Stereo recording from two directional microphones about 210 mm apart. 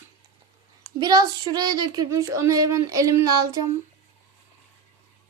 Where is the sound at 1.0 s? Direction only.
20° right (ahead or behind).